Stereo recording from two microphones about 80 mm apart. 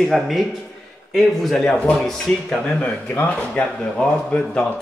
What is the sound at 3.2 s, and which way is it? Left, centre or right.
Speech, centre.